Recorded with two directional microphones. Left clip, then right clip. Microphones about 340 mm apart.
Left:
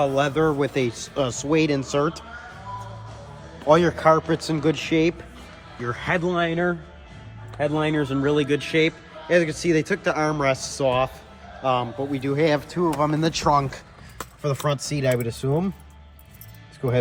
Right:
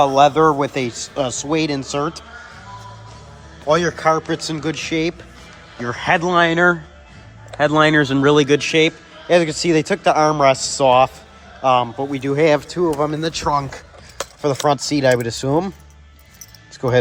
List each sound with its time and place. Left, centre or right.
0.0 s speech: centre
3.7 s speech: centre
5.8 s a man's voice: centre
14.4 s speech: centre